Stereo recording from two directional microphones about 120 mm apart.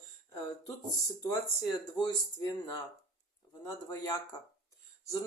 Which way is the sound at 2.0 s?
35° left (ahead or behind).